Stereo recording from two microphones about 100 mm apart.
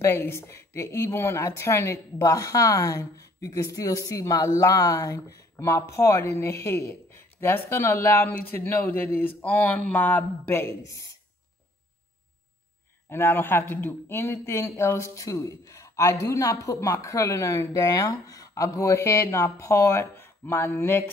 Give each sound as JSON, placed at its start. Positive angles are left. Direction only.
{"t": 0.0, "sound": "speech", "side_deg": 25}
{"t": 10.7, "sound": "speech", "side_deg": 35}
{"t": 13.1, "sound": "speech", "side_deg": 25}